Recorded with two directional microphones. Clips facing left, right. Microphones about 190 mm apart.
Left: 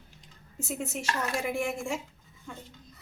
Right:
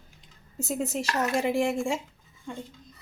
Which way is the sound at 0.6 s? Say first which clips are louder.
Right 5 dB; 40° right (ahead or behind).